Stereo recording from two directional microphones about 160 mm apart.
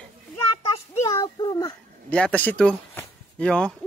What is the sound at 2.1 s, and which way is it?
Speech, 10° left (ahead or behind).